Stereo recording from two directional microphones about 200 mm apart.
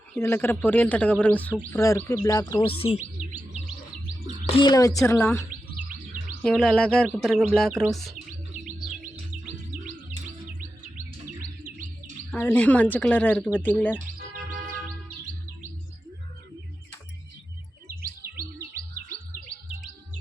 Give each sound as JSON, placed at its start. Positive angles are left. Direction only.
{"t": 0.1, "sound": "speech", "side_deg": 10}
{"t": 3.2, "sound": "chirp", "side_deg": -40}
{"t": 4.4, "sound": "speech", "side_deg": 25}
{"t": 6.4, "sound": "bird", "side_deg": 0}
{"t": 10.9, "sound": "chirp", "side_deg": -45}
{"t": 12.3, "sound": "speech", "side_deg": 10}